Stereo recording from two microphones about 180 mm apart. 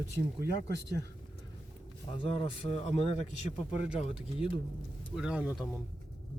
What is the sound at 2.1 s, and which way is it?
A man's voice, 30° left (ahead or behind).